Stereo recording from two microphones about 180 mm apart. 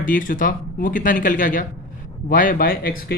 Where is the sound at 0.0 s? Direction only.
50° left (ahead or behind).